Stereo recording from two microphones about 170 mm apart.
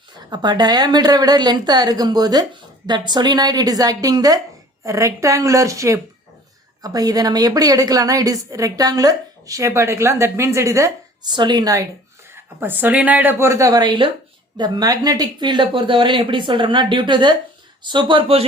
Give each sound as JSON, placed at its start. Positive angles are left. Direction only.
{"t": 0.3, "sound": "a woman's voice", "side_deg": -25}